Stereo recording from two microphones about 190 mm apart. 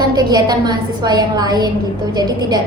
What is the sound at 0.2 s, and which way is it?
A woman's voice, 20° right (ahead or behind).